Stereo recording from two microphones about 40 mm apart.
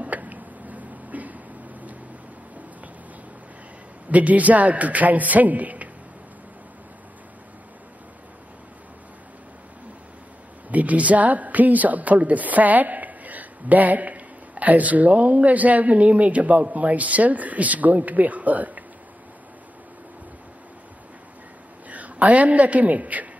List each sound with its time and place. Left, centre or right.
0.0 s a sound: right
4.1 s speech: right
10.7 s speech: right
21.8 s a woman's voice: right